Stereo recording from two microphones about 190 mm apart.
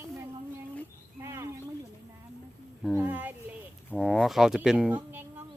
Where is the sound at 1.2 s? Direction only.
15° right (ahead or behind).